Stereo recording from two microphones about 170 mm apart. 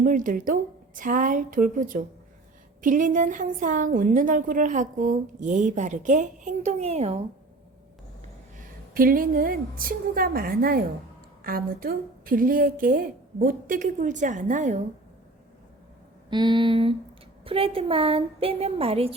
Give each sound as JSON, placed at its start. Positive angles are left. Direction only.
{"t": 0.0, "sound": "a woman's voice", "side_deg": -55}
{"t": 9.0, "sound": "a woman's voice", "side_deg": -55}
{"t": 16.3, "sound": "a sound", "side_deg": -25}
{"t": 17.4, "sound": "a woman's voice", "side_deg": -35}